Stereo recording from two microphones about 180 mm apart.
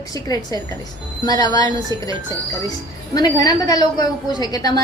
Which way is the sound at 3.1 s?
20° left (ahead or behind).